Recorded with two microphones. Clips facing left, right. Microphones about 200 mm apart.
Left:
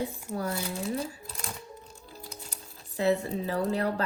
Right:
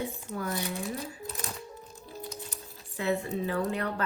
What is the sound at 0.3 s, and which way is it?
Speech, 30° left (ahead or behind).